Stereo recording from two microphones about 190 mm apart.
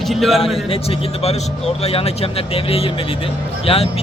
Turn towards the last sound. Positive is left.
turn(degrees=30)  # may be behind; listen again after turning